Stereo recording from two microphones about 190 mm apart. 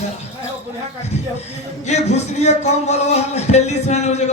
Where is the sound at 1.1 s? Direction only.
35° left (ahead or behind).